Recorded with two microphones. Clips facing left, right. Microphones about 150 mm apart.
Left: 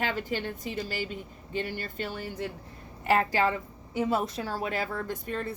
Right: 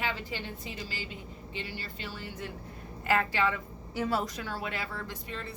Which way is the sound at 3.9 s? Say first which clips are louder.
Left 3 dB; 20° left (ahead or behind).